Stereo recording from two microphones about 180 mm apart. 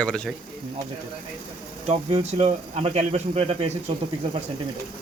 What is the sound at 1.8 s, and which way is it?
Speech, 35° right (ahead or behind).